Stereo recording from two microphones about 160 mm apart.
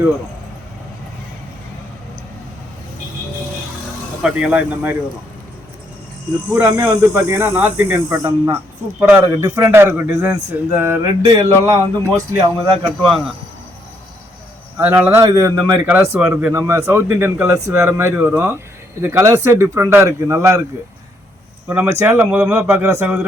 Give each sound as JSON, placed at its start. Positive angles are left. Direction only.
{"t": 4.2, "sound": "a man's voice", "side_deg": -5}
{"t": 6.5, "sound": "a man's voice", "side_deg": -15}
{"t": 13.0, "sound": "speech", "side_deg": 0}
{"t": 14.8, "sound": "a man's voice", "side_deg": -15}
{"t": 21.7, "sound": "a man's voice", "side_deg": -15}